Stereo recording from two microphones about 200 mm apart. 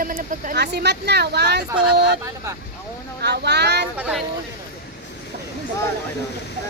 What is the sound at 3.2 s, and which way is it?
Speech, 55° right (ahead or behind).